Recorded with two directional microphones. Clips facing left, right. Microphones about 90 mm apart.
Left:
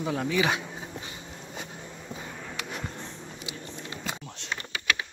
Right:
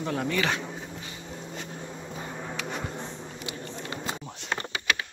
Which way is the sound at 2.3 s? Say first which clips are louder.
Right 4 dB; 25° right (ahead or behind).